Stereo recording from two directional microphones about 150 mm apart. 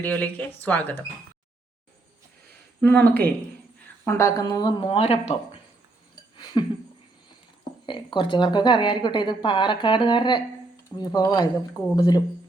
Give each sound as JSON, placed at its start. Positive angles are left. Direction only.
{"t": 0.0, "sound": "speech", "side_deg": 10}
{"t": 2.5, "sound": "speech", "side_deg": 10}
{"t": 6.3, "sound": "a sound", "side_deg": 30}
{"t": 7.9, "sound": "speech", "side_deg": 35}